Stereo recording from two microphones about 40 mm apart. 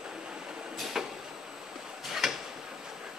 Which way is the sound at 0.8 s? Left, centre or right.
Centre.